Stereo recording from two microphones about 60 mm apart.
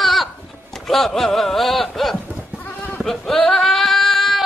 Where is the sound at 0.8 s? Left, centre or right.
Centre.